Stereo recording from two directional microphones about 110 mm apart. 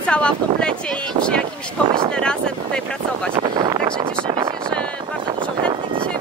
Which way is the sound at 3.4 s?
45° right (ahead or behind).